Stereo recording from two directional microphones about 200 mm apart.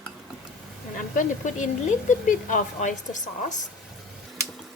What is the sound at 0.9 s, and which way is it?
A woman's voice, 40° left (ahead or behind).